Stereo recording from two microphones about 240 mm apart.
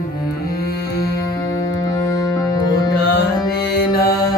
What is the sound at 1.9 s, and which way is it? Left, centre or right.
Music, centre.